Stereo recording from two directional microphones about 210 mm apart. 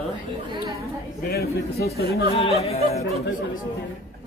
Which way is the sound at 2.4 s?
30° left (ahead or behind).